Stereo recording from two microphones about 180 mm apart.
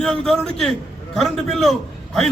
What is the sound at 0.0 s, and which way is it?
A man's voice, centre (ahead or behind).